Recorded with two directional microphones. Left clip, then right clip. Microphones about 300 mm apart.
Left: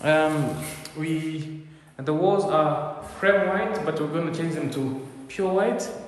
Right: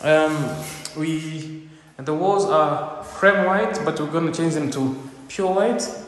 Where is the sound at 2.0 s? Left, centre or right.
Centre.